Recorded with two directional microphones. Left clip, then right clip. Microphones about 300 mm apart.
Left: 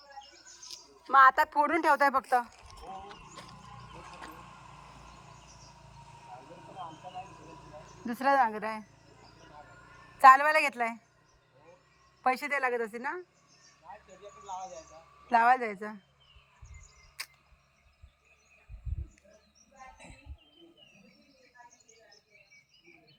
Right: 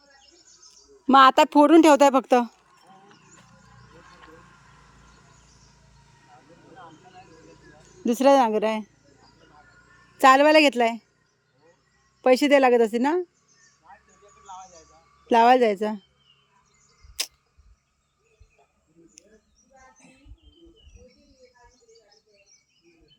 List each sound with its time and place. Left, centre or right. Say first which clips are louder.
1.1 s speech: right 6 dB; right
3.8 s vehicle: left 2 dB; right
6.1 s vehicle: left 4 dB; right
8.0 s speech: right 8 dB; right
10.2 s speech: right 4 dB; right
12.2 s speech: right 12 dB; right
14.2 s a sound: left 1 dB; right
15.3 s speech: right 8 dB; right
17.2 s tick-tock: right 11 dB; right